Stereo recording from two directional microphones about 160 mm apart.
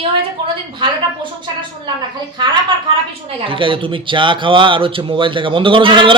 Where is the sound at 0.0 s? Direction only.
30° right (ahead or behind).